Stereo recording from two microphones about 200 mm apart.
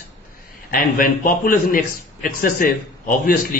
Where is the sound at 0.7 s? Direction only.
45° left (ahead or behind).